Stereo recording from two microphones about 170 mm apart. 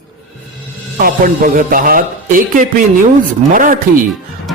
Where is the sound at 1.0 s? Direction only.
55° right (ahead or behind).